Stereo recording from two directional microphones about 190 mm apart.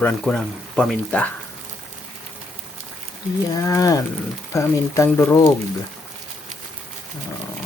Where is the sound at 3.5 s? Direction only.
20° left (ahead or behind).